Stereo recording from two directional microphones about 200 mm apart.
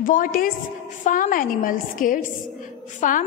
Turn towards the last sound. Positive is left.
turn(degrees=40)  # may be behind; listen again after turning